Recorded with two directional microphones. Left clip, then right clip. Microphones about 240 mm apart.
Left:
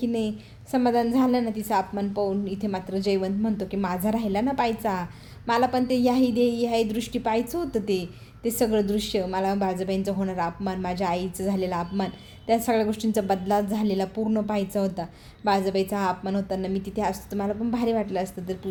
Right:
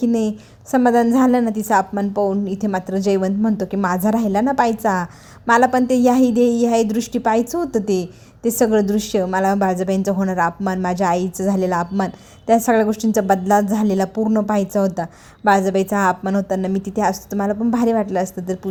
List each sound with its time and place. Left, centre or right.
0.0 s a woman's voice: right